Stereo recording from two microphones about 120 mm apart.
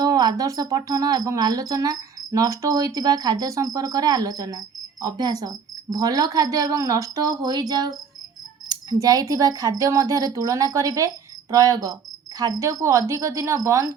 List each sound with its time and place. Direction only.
0.0 s cricket: 35° right (ahead or behind)
8.7 s speech: 30° right (ahead or behind)